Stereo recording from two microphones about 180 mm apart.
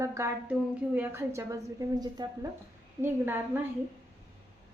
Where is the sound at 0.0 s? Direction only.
15° right (ahead or behind).